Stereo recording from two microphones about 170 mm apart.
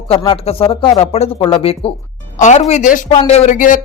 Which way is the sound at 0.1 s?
30° left (ahead or behind).